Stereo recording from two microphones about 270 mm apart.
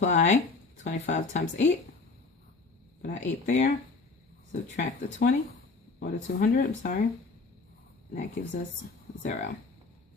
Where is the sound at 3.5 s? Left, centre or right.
Left.